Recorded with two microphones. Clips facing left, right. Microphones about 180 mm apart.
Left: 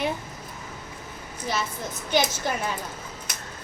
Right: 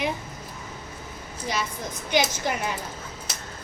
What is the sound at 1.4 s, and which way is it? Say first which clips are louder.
A woman's voice: even; 15° right (ahead or behind).